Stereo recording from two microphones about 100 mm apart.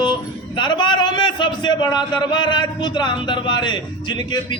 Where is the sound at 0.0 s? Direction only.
50° left (ahead or behind).